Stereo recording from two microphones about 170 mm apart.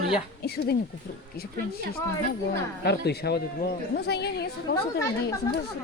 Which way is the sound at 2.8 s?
70° left (ahead or behind).